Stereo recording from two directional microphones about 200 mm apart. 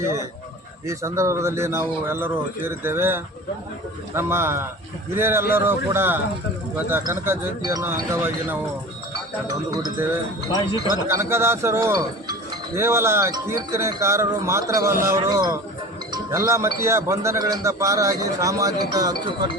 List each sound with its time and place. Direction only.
0.9 s speech: 15° right (ahead or behind)
9.7 s speech: 20° right (ahead or behind)